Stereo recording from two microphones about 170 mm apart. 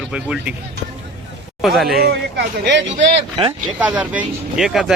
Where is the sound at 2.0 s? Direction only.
75° right (ahead or behind).